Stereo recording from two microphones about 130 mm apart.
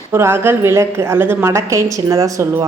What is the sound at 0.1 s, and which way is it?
A woman's voice, 20° right (ahead or behind).